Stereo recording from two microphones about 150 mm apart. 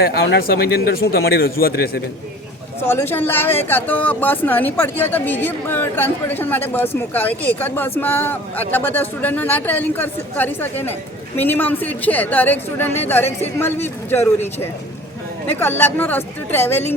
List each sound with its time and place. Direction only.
0.0 s a man's voice: 90° left
2.8 s speech: 15° left (ahead or behind)